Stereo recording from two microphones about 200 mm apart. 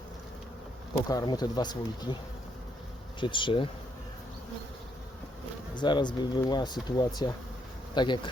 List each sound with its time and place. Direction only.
1.0 s speech: 20° left (ahead or behind)
3.2 s speech: 25° left (ahead or behind)
5.7 s speech: 20° left (ahead or behind)